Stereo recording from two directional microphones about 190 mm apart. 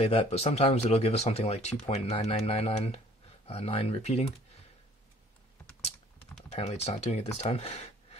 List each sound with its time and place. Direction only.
0.0 s speech: 30° left (ahead or behind)
6.5 s speech: 35° left (ahead or behind)